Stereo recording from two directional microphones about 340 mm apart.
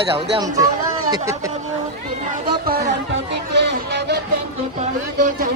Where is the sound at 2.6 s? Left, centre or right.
Right.